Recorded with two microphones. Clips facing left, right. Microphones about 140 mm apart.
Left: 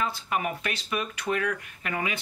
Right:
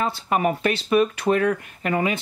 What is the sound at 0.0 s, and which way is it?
Speech, 35° right (ahead or behind).